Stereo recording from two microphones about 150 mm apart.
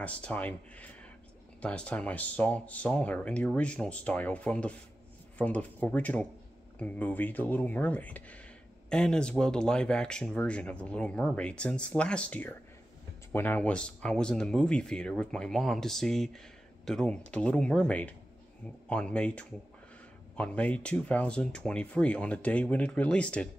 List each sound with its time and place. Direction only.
0.0 s speech: 10° left (ahead or behind)